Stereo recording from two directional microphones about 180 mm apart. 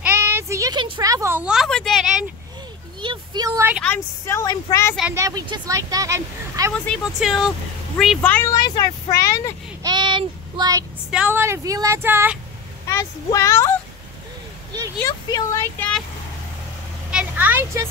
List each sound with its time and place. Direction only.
0.0 s a sound: 15° right (ahead or behind)
3.0 s a sound: 25° right (ahead or behind)
3.8 s speech: 10° left (ahead or behind)
5.1 s speech: 20° right (ahead or behind)
6.9 s speech: centre (ahead or behind)
8.5 s speech: 20° left (ahead or behind)
9.8 s child singing: 25° right (ahead or behind)
11.1 s speech: 5° right (ahead or behind)
12.8 s speech: 15° left (ahead or behind)
15.0 s speech: 15° left (ahead or behind)
17.1 s vehicle: 10° right (ahead or behind)